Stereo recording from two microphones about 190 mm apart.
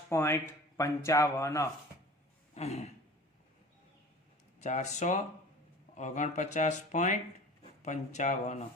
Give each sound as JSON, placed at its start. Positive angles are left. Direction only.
{"t": 0.1, "sound": "speech", "side_deg": 15}
{"t": 2.6, "sound": "speech", "side_deg": 35}
{"t": 4.6, "sound": "speech", "side_deg": 40}